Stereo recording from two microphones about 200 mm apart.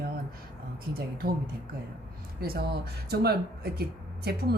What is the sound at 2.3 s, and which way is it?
Speech, 50° right (ahead or behind).